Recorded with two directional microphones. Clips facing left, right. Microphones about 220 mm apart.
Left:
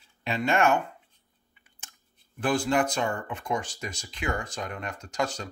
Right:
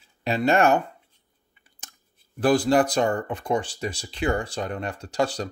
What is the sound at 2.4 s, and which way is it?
Speech, 35° right (ahead or behind).